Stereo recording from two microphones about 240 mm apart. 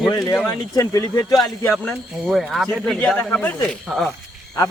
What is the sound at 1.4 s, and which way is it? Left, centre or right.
Speech, centre.